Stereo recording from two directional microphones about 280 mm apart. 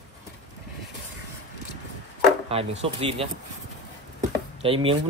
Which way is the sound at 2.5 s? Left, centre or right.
Right.